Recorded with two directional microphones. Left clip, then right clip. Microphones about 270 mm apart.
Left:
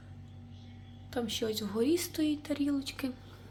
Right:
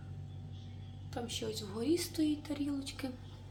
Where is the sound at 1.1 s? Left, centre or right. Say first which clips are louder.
Left 6 dB; left.